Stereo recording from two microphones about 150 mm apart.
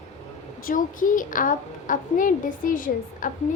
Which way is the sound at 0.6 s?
60° left (ahead or behind).